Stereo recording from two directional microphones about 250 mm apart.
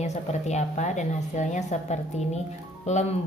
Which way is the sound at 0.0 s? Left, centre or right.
Left.